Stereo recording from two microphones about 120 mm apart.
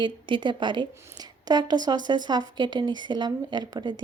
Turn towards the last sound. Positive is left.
turn(degrees=-40)  # may be behind; listen again after turning